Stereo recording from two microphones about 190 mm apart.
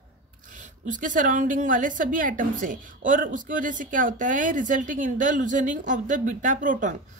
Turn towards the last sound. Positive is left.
turn(degrees=-45)  # may be behind; listen again after turning